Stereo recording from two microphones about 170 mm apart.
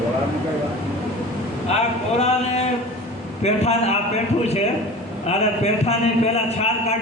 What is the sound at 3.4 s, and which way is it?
Speech, 40° left (ahead or behind).